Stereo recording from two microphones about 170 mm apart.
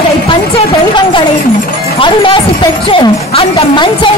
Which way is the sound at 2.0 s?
30° left (ahead or behind).